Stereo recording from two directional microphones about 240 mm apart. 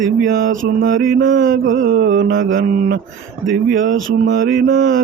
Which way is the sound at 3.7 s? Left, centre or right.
Right.